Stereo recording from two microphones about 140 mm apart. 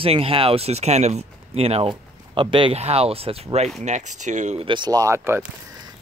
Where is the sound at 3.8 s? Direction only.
55° right (ahead or behind).